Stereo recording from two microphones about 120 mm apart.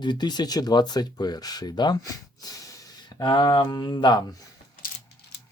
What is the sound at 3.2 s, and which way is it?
Speech, 40° left (ahead or behind).